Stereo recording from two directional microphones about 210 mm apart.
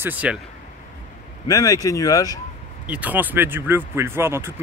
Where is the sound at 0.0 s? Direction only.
5° right (ahead or behind).